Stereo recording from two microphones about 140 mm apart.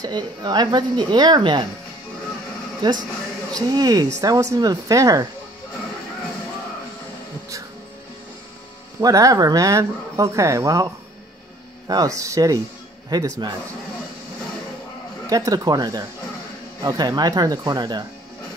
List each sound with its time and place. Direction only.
0.0 s speech: 30° right (ahead or behind)
2.8 s speech: 30° right (ahead or behind)
9.0 s speech: 25° right (ahead or behind)
11.9 s speech: 25° right (ahead or behind)
15.2 s speech: 25° right (ahead or behind)